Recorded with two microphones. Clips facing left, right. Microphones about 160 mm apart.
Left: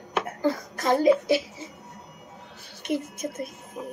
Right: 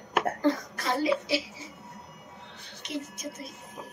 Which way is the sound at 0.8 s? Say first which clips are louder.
Left 7 dB; 50° left (ahead or behind).